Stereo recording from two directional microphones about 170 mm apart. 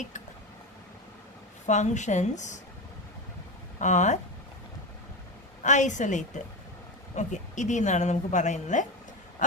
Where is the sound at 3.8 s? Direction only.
45° left (ahead or behind).